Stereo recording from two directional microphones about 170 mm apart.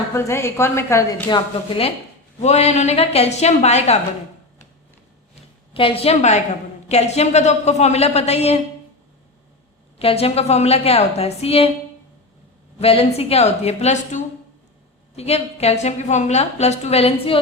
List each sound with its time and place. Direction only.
0.1 s a woman's voice: 15° left (ahead or behind)
2.4 s a woman's voice: 40° left (ahead or behind)
5.3 s a sound: 30° left (ahead or behind)
6.8 s a woman's voice: 40° left (ahead or behind)
10.0 s a woman's voice: 35° left (ahead or behind)
12.8 s a woman's voice: 35° left (ahead or behind)